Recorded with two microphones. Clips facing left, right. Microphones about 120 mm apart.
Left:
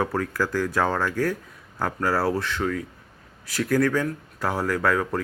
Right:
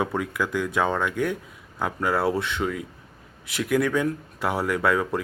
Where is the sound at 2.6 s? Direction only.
15° right (ahead or behind).